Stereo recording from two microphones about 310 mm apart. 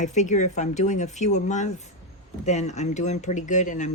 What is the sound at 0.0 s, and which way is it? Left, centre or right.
Speech, left.